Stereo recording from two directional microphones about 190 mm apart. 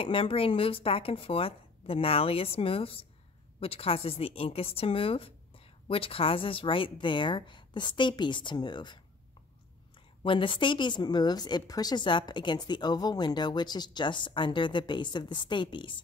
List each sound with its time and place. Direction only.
0.0 s a woman's voice: 30° left (ahead or behind)
10.2 s a woman's voice: 25° left (ahead or behind)